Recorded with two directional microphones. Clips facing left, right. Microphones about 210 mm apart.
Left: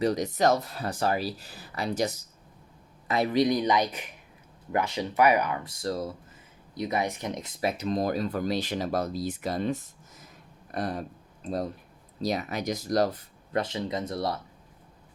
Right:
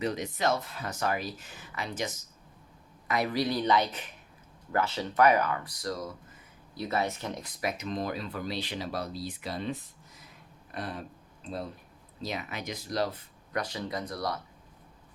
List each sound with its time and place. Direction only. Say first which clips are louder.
0.0 s speech: left 6 dB; 40° left (ahead or behind)
3.1 s speech: left 5 dB; 25° left (ahead or behind)
6.7 s speech: left 2 dB; 15° left (ahead or behind); by 13.1 s 45° left (ahead or behind)
13.5 s speech: left 4 dB; 25° left (ahead or behind)